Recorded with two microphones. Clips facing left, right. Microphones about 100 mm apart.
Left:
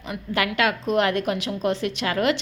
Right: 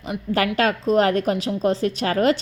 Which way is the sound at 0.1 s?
35° right (ahead or behind).